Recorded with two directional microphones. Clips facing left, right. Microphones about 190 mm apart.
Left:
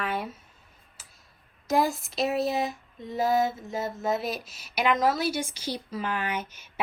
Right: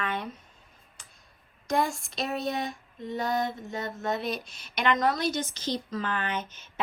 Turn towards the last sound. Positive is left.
turn(degrees=10)  # may be behind; listen again after turning